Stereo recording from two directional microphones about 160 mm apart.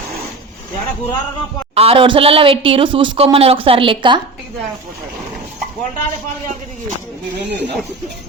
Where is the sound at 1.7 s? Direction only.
40° right (ahead or behind).